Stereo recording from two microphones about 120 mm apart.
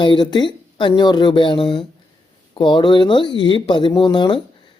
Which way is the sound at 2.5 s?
40° left (ahead or behind).